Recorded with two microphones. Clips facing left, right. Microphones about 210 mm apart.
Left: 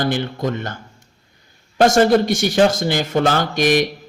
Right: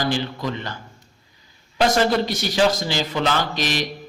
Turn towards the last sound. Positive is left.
turn(degrees=55)  # may be behind; listen again after turning